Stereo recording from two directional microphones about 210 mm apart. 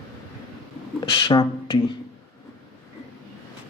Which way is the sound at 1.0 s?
20° left (ahead or behind).